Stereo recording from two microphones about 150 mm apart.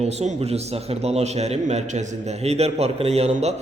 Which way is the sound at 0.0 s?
45° right (ahead or behind).